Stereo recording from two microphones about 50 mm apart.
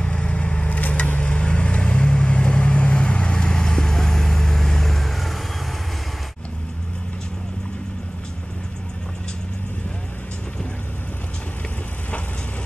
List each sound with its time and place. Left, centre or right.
0.0 s vehicle: centre